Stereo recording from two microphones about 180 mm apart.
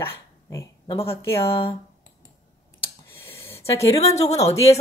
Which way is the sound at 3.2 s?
15° left (ahead or behind).